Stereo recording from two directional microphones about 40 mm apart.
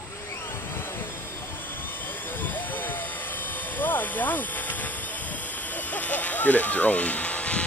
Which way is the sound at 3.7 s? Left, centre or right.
Left.